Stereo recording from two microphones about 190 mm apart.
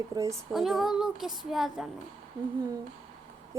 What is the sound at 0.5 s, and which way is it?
Speech, centre (ahead or behind).